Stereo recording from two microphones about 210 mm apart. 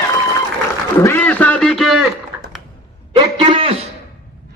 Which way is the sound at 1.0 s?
10° left (ahead or behind).